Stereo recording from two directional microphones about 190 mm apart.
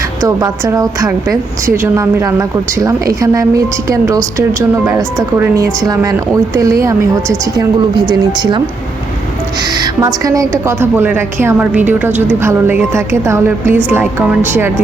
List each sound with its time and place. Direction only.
0.2 s speech: 20° right (ahead or behind)
9.8 s speech: 20° right (ahead or behind)